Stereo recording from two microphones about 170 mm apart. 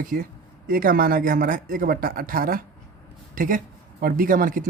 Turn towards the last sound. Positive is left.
turn(degrees=-55)  # may be behind; listen again after turning